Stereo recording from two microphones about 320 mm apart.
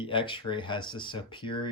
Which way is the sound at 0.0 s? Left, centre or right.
Centre.